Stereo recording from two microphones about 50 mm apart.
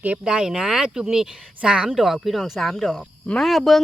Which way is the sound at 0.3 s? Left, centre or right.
Centre.